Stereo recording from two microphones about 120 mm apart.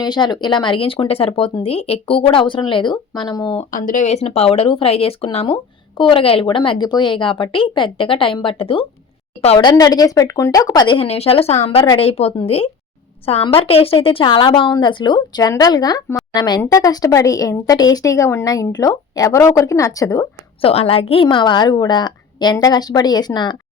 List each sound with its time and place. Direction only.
0.0 s a woman's voice: 35° left (ahead or behind)
3.6 s speech: 80° left; by 8.9 s 50° left (ahead or behind)
9.6 s a woman's voice: 35° left (ahead or behind)
20.6 s a woman's voice: 50° left (ahead or behind)